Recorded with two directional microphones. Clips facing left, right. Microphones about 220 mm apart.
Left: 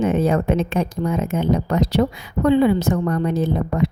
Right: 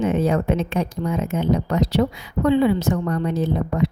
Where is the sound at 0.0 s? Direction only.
50° left (ahead or behind).